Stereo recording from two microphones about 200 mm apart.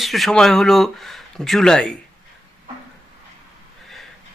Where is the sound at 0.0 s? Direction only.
Centre (ahead or behind).